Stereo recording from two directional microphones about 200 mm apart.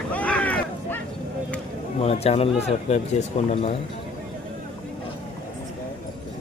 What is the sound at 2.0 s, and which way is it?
Speech, 30° left (ahead or behind).